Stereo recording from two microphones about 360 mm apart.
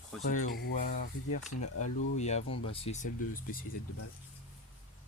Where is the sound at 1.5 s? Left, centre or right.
Left.